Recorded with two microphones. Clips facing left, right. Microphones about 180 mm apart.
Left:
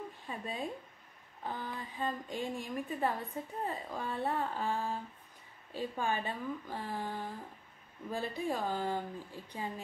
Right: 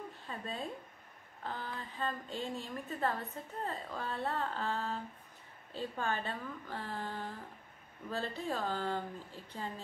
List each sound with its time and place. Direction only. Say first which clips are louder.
0.3 s a woman's voice: left 2 dB; 15° left (ahead or behind)